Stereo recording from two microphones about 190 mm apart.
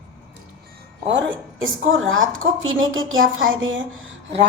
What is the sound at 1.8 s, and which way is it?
A woman's voice, 90° right.